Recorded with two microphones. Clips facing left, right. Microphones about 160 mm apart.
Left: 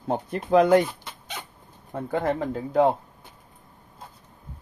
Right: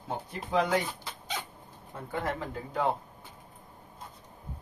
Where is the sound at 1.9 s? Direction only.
50° left (ahead or behind).